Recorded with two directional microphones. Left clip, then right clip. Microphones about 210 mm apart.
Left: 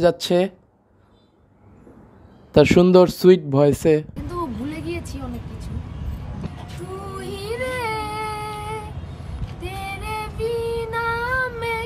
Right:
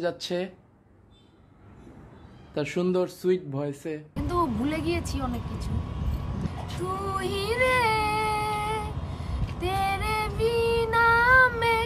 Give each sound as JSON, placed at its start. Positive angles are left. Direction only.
{"t": 0.0, "sound": "speech", "side_deg": 40}
{"t": 2.5, "sound": "speech", "side_deg": 40}
{"t": 4.1, "sound": "vehicle", "side_deg": 0}
{"t": 6.8, "sound": "child singing", "side_deg": 0}